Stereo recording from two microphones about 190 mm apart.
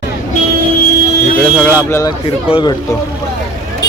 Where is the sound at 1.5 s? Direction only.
5° left (ahead or behind).